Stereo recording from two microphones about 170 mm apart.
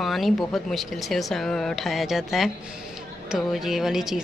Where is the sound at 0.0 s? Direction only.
Centre (ahead or behind).